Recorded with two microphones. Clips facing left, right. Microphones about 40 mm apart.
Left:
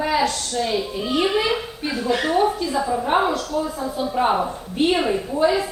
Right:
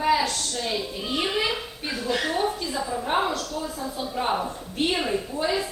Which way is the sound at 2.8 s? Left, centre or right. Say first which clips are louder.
Left 5 dB; centre.